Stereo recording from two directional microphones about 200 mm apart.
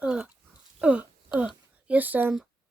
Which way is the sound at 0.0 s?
5° right (ahead or behind).